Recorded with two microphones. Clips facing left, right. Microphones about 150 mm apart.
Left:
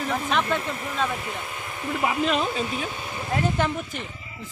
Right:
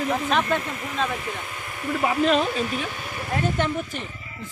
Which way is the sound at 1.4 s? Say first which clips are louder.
Left 1 dB; 25° left (ahead or behind).